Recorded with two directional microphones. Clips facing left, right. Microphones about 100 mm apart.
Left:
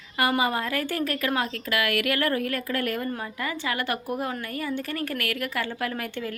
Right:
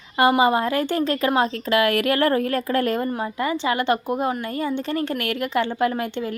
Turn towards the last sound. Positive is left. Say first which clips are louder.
# right 8 dB
turn(degrees=-25)  # may be behind; listen again after turning